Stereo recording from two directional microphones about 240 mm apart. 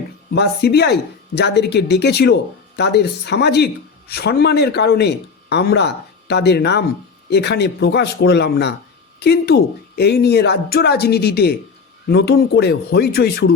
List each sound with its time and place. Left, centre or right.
0.3 s a man's voice: left